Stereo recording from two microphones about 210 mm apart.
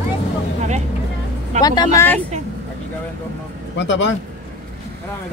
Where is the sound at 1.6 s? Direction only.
20° left (ahead or behind).